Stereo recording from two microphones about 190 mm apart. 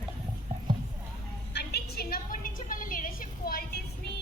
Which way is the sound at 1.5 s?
55° left (ahead or behind).